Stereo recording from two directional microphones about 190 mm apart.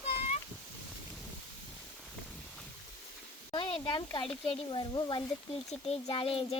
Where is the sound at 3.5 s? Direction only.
25° left (ahead or behind).